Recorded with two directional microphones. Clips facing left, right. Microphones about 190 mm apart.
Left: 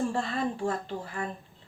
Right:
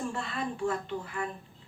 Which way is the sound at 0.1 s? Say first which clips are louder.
Left 5 dB; 35° left (ahead or behind).